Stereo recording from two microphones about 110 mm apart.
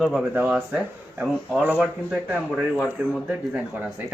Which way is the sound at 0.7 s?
15° right (ahead or behind).